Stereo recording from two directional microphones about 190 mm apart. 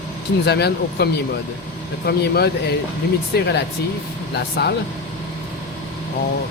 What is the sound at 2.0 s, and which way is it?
Speech, 55° left (ahead or behind).